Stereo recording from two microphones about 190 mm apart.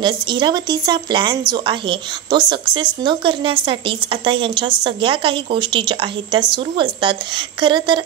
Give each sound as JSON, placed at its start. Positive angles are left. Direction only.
{"t": 0.0, "sound": "a woman's voice", "side_deg": -25}